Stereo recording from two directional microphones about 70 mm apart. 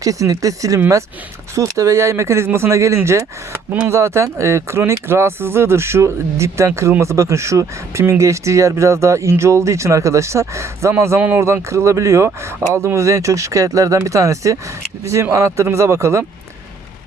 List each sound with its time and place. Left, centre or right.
0.0 s speech: right
3.7 s speech: right
3.9 s speech: right